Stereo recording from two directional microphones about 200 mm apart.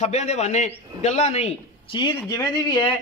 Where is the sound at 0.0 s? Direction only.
35° left (ahead or behind).